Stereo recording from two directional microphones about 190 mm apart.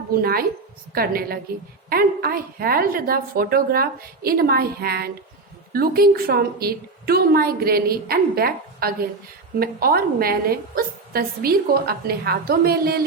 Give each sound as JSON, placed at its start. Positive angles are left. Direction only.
{"t": 0.1, "sound": "a woman's voice", "side_deg": -50}